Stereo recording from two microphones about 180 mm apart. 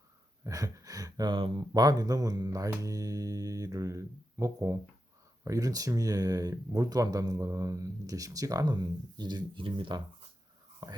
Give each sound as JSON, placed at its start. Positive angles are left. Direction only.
{"t": 0.4, "sound": "speech", "side_deg": -20}